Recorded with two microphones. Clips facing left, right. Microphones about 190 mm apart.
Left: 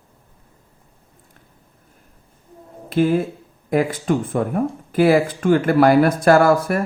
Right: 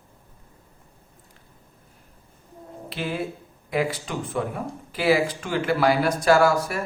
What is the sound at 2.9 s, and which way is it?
Speech, 50° left (ahead or behind).